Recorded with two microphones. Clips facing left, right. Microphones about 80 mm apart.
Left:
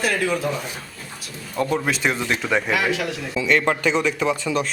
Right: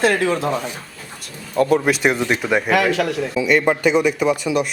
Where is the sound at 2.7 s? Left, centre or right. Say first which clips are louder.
Right 5 dB; right.